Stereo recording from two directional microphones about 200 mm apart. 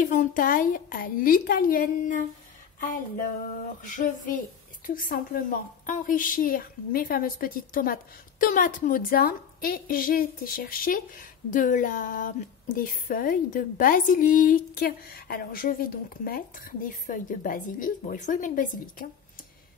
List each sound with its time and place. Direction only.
0.0 s a woman's voice: 40° left (ahead or behind)